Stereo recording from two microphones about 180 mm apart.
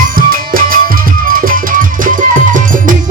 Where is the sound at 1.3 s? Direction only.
50° right (ahead or behind).